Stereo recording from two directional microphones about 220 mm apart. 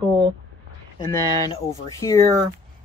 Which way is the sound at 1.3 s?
20° left (ahead or behind).